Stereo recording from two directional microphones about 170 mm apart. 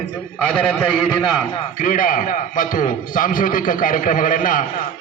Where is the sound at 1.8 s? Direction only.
55° left (ahead or behind).